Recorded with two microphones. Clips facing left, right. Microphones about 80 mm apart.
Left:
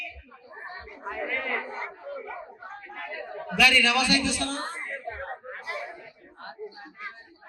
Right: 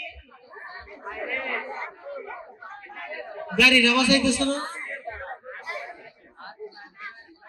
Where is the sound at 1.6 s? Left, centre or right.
Right.